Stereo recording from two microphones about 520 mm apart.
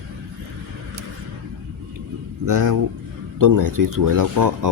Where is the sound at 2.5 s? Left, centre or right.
Right.